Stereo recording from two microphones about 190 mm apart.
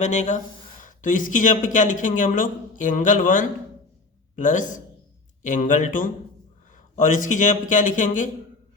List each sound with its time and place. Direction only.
0.0 s a man's voice: 40° left (ahead or behind)